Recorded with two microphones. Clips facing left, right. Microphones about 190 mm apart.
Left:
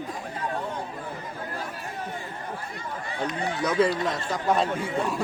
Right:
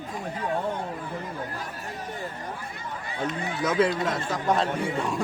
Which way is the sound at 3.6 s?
Centre (ahead or behind).